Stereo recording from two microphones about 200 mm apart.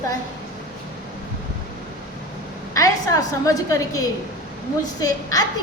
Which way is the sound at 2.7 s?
15° left (ahead or behind).